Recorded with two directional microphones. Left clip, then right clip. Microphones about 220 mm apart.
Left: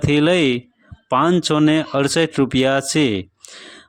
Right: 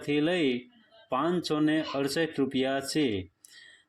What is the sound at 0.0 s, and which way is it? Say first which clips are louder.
Speech: left 11 dB; 40° left (ahead or behind).